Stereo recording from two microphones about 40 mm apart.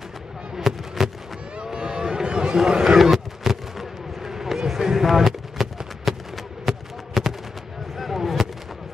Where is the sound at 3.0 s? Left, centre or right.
Centre.